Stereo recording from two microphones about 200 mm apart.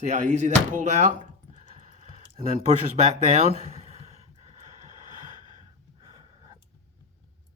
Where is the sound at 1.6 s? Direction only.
40° right (ahead or behind).